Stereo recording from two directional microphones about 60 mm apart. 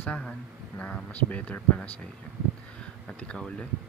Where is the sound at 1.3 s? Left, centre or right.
Left.